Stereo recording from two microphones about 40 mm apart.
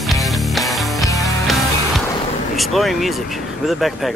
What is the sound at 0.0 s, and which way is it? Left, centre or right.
Music, centre.